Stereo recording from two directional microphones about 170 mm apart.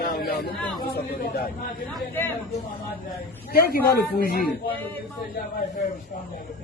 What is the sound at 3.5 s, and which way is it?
Speech, 65° left (ahead or behind).